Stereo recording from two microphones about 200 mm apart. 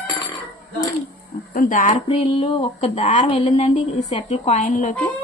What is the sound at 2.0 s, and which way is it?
Speech, 30° left (ahead or behind).